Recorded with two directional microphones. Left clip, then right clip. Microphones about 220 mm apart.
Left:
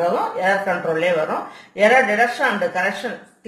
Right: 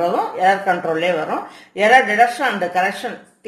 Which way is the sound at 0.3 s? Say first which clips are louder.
Right 3 dB; 50° right (ahead or behind).